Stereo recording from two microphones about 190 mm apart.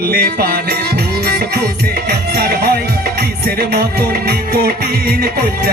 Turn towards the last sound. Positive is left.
turn(degrees=-55)  # may be behind; listen again after turning